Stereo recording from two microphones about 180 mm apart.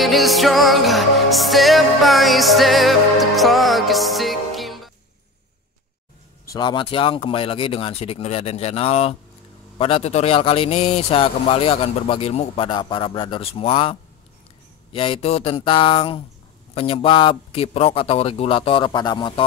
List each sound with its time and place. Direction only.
0.0 s music: centre (ahead or behind)
6.5 s a man's voice: 25° left (ahead or behind)